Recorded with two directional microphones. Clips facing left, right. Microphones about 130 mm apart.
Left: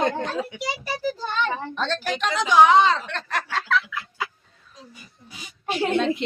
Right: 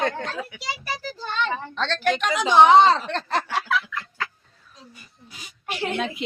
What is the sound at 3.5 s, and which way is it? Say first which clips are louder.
Fowl: left 1 dB; 10° right (ahead or behind).